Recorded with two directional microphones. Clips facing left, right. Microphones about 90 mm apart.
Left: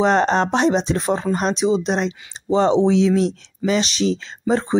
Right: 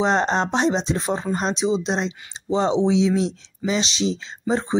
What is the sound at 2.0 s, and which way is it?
Speech, 55° left (ahead or behind).